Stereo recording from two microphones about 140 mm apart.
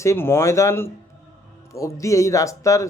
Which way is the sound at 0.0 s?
20° left (ahead or behind).